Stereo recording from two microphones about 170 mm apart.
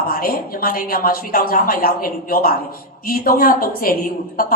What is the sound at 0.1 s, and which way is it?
A woman's voice, 60° left (ahead or behind).